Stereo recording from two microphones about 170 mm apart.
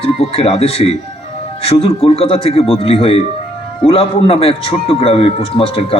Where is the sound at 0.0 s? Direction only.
35° left (ahead or behind).